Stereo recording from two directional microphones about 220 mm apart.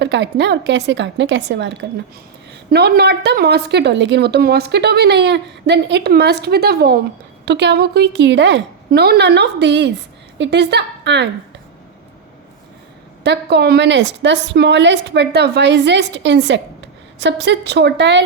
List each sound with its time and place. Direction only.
0.0 s a woman's voice: 50° right (ahead or behind)
13.2 s a woman's voice: 50° right (ahead or behind)